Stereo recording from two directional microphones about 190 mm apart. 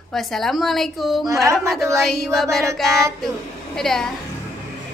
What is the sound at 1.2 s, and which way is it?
Speech, 15° right (ahead or behind).